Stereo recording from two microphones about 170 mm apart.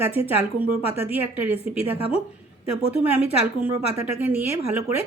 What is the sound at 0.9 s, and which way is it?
Speech, 10° right (ahead or behind).